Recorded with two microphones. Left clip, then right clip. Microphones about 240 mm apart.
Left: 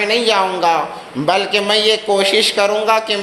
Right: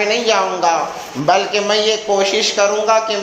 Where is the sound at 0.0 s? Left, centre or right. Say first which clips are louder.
Left 1 dB; left.